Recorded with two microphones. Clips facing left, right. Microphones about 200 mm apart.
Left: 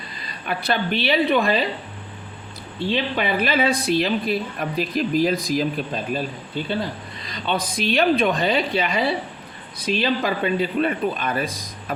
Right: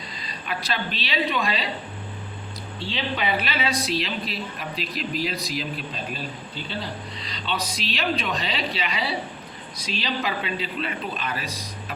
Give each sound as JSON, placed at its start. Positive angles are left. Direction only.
{"t": 0.4, "sound": "a woman's voice", "side_deg": 55}
{"t": 2.7, "sound": "speech", "side_deg": 55}
{"t": 7.3, "sound": "speech", "side_deg": 50}